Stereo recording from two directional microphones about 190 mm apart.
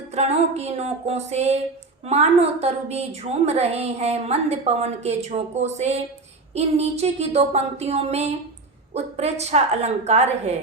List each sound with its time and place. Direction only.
0.1 s a woman's voice: 35° right (ahead or behind)